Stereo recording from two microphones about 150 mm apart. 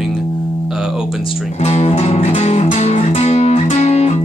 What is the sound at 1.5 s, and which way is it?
Music, 45° left (ahead or behind).